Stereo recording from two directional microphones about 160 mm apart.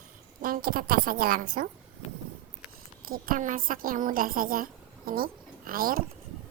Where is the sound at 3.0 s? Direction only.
65° right (ahead or behind).